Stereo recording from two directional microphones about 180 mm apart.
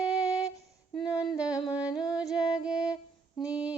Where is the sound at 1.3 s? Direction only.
5° right (ahead or behind).